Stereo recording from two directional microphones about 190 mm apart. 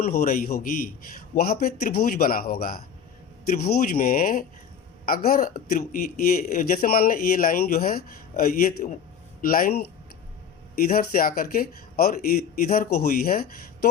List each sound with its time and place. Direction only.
0.1 s speech: 50° left (ahead or behind)